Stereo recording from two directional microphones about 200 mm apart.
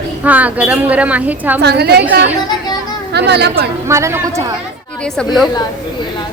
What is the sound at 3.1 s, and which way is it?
Speech, 55° right (ahead or behind).